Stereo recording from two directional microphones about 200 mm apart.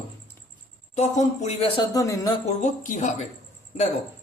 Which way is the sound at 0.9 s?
35° left (ahead or behind).